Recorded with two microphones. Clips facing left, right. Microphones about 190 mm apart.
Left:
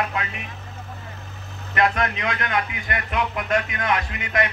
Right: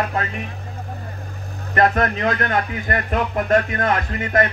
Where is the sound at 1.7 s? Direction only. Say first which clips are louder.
Right 4 dB; 40° right (ahead or behind).